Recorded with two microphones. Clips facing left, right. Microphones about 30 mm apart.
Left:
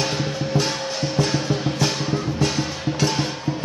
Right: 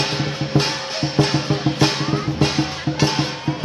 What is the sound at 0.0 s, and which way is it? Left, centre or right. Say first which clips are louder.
Music: right 1 dB; right.